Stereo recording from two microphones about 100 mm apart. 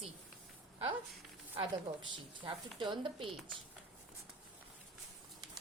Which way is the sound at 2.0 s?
55° right (ahead or behind).